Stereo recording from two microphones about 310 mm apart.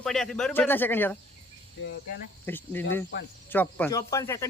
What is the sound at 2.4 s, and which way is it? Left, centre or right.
A man's voice, centre.